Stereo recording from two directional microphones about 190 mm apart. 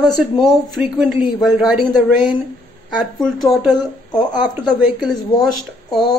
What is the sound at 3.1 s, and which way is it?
Speech, centre (ahead or behind).